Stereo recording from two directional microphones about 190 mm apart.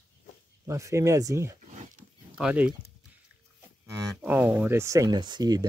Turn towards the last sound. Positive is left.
turn(degrees=-20)  # may be behind; listen again after turning